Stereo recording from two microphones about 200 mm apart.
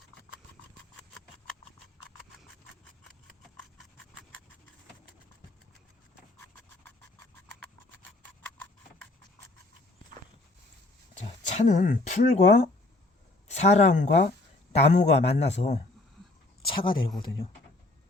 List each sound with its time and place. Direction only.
11.2 s a man's voice: 35° left (ahead or behind)